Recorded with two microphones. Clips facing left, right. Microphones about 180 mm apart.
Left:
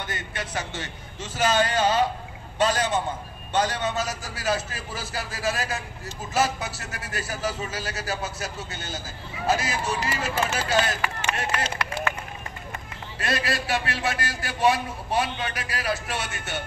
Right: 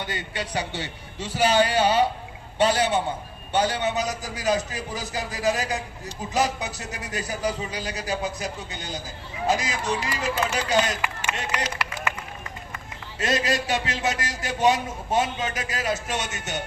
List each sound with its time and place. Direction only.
0.0 s a man's voice: 15° right (ahead or behind)
11.1 s speech: 30° left (ahead or behind)
13.2 s a man's voice: 20° right (ahead or behind)